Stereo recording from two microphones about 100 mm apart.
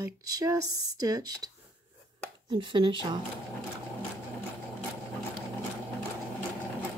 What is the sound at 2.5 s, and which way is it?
Speech, 60° right (ahead or behind).